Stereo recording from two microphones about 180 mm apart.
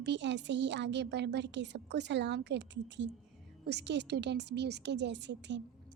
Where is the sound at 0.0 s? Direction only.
75° right (ahead or behind).